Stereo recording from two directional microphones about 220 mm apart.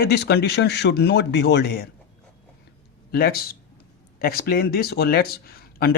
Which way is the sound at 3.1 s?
45° left (ahead or behind).